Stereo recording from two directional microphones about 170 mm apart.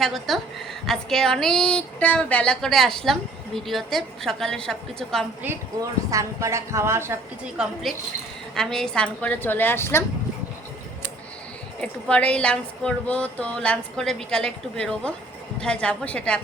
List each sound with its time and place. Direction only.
0.0 s a woman's voice: centre (ahead or behind)
5.4 s a woman's voice: 10° right (ahead or behind)
7.6 s a woman's voice: centre (ahead or behind); by 10.0 s 15° left (ahead or behind)
11.8 s a woman's voice: 5° left (ahead or behind)